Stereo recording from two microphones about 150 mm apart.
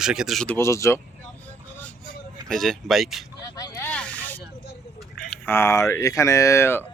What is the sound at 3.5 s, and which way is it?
Vehicle, 25° left (ahead or behind).